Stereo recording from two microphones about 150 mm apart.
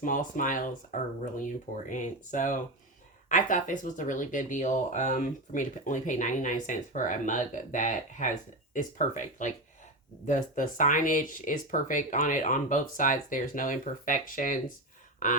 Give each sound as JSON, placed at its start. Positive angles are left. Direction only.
{"t": 0.0, "sound": "speech", "side_deg": 60}